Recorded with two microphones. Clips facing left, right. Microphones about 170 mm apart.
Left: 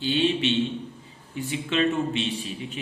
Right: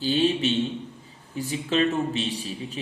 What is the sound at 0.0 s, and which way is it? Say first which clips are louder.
A man's voice: right 1 dB; 40° right (ahead or behind).